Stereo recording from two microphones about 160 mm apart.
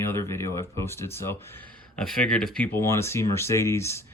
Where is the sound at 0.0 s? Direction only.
15° left (ahead or behind).